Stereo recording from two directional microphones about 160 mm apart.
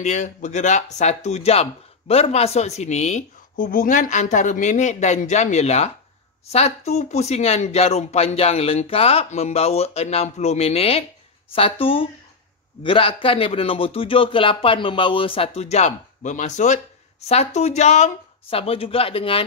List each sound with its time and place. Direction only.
0.0 s speech: 45° left (ahead or behind)